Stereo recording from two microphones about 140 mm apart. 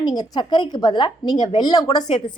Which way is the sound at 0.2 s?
35° left (ahead or behind).